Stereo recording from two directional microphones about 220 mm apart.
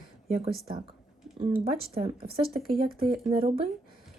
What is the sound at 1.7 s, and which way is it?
Speech, 45° right (ahead or behind).